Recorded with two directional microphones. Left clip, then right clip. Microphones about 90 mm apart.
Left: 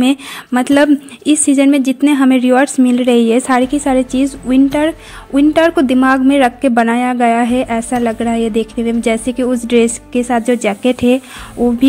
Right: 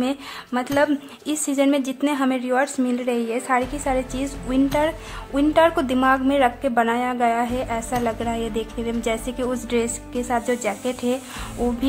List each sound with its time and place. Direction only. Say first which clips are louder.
1.2 s a woman's voice: left 9 dB; 40° left (ahead or behind)
2.0 s a woman's voice: left 12 dB; 50° left (ahead or behind); by 3.6 s 80° left
3.6 s a woman's voice: left 10 dB; 50° left (ahead or behind)
8.0 s a woman's voice: left 9 dB; 40° left (ahead or behind)
10.7 s a woman's voice: left 11 dB; 55° left (ahead or behind)
11.6 s speech: left 10 dB; centre (ahead or behind)